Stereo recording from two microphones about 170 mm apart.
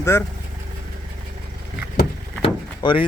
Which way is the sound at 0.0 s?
15° left (ahead or behind).